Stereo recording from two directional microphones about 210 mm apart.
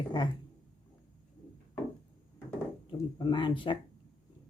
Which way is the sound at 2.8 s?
20° left (ahead or behind).